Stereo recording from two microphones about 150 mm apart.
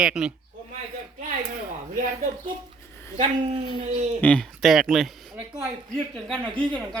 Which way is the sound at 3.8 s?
45° right (ahead or behind).